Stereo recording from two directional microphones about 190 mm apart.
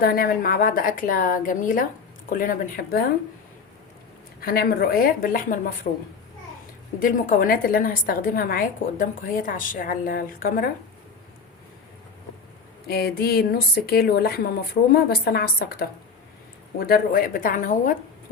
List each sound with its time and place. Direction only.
0.0 s a woman's voice: 50° left (ahead or behind)
4.4 s a woman's voice: 50° left (ahead or behind)
7.0 s a woman's voice: 50° left (ahead or behind)
12.9 s a woman's voice: 55° left (ahead or behind)